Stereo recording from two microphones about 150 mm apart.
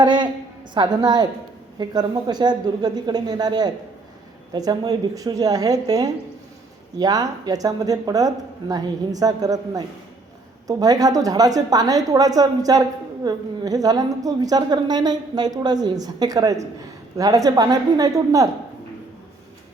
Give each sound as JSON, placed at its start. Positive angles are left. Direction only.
{"t": 0.0, "sound": "a woman's voice", "side_deg": -30}